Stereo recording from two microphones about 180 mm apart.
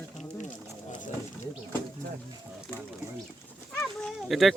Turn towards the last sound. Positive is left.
turn(degrees=0)  # may be behind; listen again after turning